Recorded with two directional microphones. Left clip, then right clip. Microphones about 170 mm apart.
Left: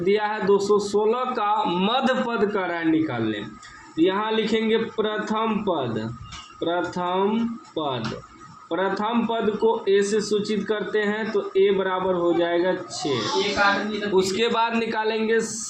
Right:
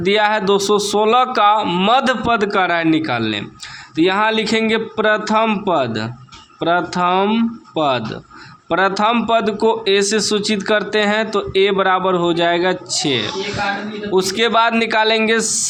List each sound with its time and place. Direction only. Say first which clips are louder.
0.0 s a man's voice: right 7 dB; 55° right (ahead or behind)
8.7 s a man's voice: right 9 dB; 65° right (ahead or behind)
14.2 s a man's voice: right 7 dB; 40° right (ahead or behind); by 15.6 s 55° right (ahead or behind)